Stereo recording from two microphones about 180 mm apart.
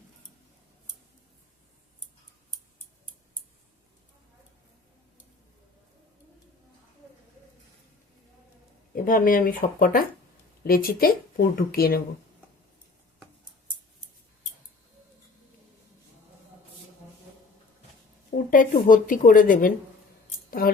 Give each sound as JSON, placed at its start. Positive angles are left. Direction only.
{"t": 9.0, "sound": "a woman's voice", "side_deg": 50}
{"t": 18.5, "sound": "a woman's voice", "side_deg": 50}